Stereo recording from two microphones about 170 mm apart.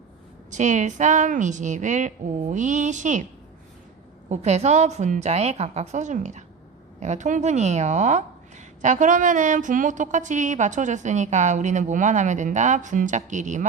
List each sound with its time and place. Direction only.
0.5 s a woman's voice: 45° right (ahead or behind)
4.3 s a woman's voice: 40° right (ahead or behind)